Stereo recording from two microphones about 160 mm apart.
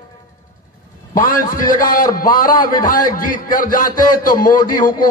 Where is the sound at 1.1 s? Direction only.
60° left (ahead or behind).